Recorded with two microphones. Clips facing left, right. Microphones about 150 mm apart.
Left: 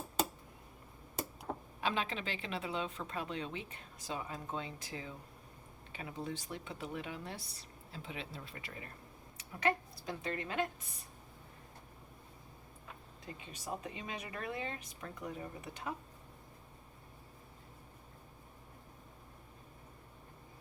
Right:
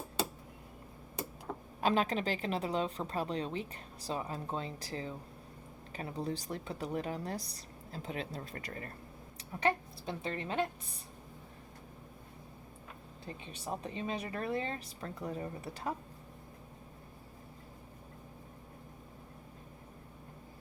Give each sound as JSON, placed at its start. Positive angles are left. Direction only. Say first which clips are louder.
{"t": 1.8, "sound": "a woman's voice", "louder": "right 7 dB", "side_deg": -40}
{"t": 9.4, "sound": "a woman's voice", "louder": "right 2 dB", "side_deg": -30}
{"t": 13.2, "sound": "a woman's voice", "louder": "right 3 dB", "side_deg": -30}